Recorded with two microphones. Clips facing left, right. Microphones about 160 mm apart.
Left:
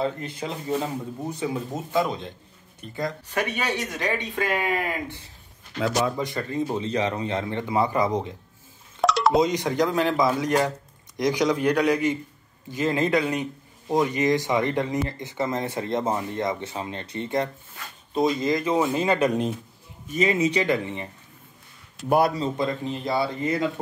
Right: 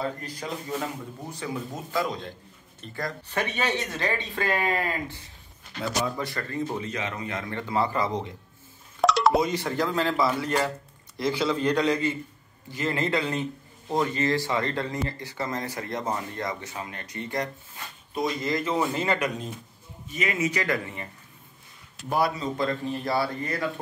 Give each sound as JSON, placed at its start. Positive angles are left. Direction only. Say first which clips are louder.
{"t": 0.0, "sound": "a man's voice", "louder": "left 4 dB", "side_deg": 25}
{"t": 6.9, "sound": "a man's voice", "louder": "left 7 dB", "side_deg": 30}
{"t": 9.0, "sound": "wind chime", "louder": "even", "side_deg": 0}
{"t": 9.4, "sound": "a man's voice", "louder": "left 4 dB", "side_deg": 15}
{"t": 20.2, "sound": "a man's voice", "louder": "left 6 dB", "side_deg": 30}
{"t": 22.6, "sound": "a man's voice", "louder": "left 1 dB", "side_deg": 20}